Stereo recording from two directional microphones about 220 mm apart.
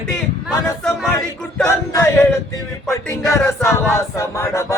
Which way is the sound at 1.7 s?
15° left (ahead or behind).